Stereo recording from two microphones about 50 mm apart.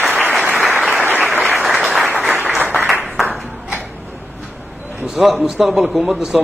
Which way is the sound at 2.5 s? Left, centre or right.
Right.